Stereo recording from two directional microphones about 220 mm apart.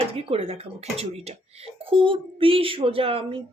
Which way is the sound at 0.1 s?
25° right (ahead or behind).